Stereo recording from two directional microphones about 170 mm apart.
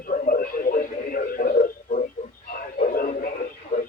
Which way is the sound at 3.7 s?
35° left (ahead or behind).